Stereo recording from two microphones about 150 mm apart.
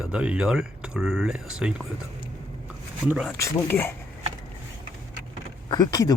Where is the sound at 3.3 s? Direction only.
20° left (ahead or behind).